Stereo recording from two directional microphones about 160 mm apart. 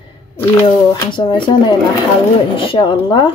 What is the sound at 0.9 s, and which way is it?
Speech, 30° left (ahead or behind).